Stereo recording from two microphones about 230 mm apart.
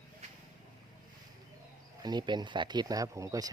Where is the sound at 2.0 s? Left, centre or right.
Centre.